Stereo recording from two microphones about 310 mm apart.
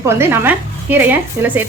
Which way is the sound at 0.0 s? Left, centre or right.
Centre.